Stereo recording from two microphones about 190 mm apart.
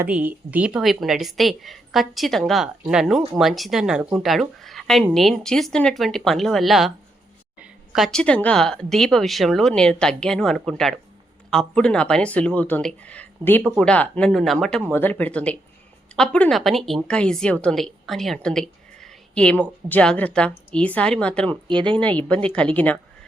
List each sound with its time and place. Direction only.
0.0 s a woman's voice: 10° right (ahead or behind)
21.5 s speech: 25° right (ahead or behind)
22.4 s speech: 5° left (ahead or behind)